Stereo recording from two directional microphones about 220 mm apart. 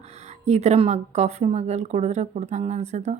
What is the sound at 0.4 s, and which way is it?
A woman's voice, 30° right (ahead or behind).